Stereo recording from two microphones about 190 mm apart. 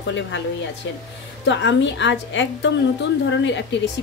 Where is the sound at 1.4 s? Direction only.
70° left (ahead or behind).